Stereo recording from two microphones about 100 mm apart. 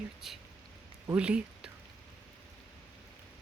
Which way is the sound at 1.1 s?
10° right (ahead or behind).